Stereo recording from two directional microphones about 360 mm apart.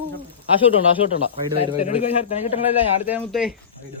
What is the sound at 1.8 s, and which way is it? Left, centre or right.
Speech, centre.